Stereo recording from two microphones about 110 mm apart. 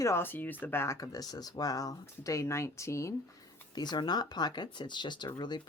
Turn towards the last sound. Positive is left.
turn(degrees=40)  # may be behind; listen again after turning